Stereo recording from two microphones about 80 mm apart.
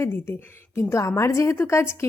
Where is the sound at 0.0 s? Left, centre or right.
Left.